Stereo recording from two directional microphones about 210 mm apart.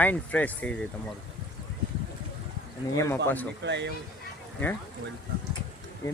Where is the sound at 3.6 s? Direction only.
55° right (ahead or behind).